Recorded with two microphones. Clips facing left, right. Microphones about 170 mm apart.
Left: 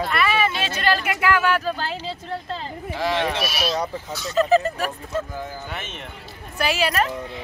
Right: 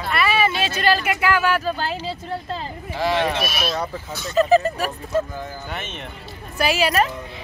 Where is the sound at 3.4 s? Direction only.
55° right (ahead or behind).